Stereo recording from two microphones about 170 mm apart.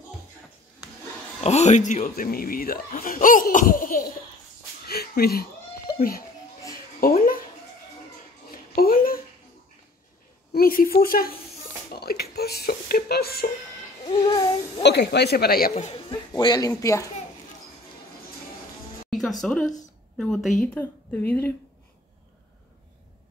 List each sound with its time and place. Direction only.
1.4 s speech: 40° left (ahead or behind); by 4.1 s 55° left (ahead or behind)
4.8 s a sound: 65° left (ahead or behind)
5.9 s a child's voice: 60° left (ahead or behind)
7.0 s a sound: 60° left (ahead or behind)
8.5 s a sound: 60° left (ahead or behind)
10.5 s a woman's voice: 60° left (ahead or behind)
14.2 s speech: 20° left (ahead or behind)
14.8 s speech: 80° left; by 15.7 s 65° left (ahead or behind)
15.7 s speech: 35° left (ahead or behind); by 17.1 s 20° left (ahead or behind)
19.0 s a woman's voice: centre (ahead or behind)